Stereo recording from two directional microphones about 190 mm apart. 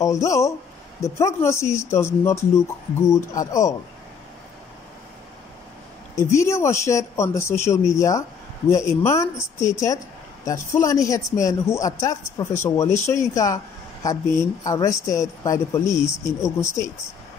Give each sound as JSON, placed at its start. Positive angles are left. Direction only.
{"t": 0.0, "sound": "speech", "side_deg": 15}
{"t": 6.2, "sound": "speech", "side_deg": 15}
{"t": 10.4, "sound": "speech", "side_deg": 15}